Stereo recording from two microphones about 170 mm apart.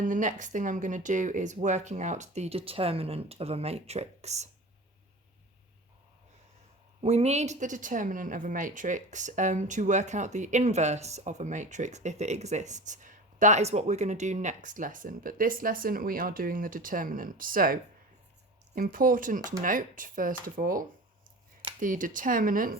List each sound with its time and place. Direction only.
0.0 s speech: 50° right (ahead or behind)
7.0 s speech: 40° right (ahead or behind); by 22.8 s 55° right (ahead or behind)